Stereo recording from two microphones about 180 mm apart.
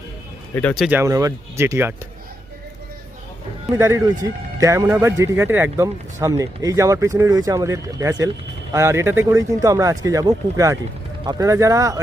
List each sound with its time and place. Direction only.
0.5 s speech: 5° left (ahead or behind)
0.9 s speech: 15° right (ahead or behind)
3.8 s speech: 15° right (ahead or behind)